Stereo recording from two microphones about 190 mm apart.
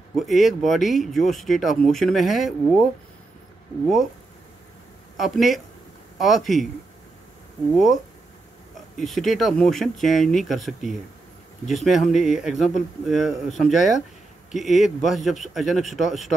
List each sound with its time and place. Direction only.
0.1 s speech: centre (ahead or behind)
5.1 s speech: centre (ahead or behind)
7.7 s speech: centre (ahead or behind)